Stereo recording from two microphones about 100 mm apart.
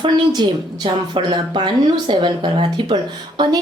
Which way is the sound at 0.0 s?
50° right (ahead or behind).